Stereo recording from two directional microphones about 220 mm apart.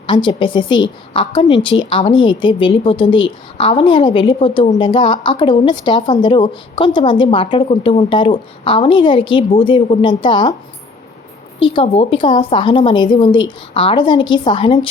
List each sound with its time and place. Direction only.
0.1 s a woman's voice: 20° left (ahead or behind)
11.6 s a woman's voice: 25° left (ahead or behind)